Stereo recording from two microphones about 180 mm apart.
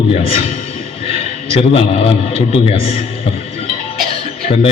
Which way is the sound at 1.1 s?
35° left (ahead or behind).